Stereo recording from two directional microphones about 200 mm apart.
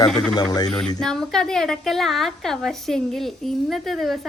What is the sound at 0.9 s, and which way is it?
A woman's voice, centre (ahead or behind).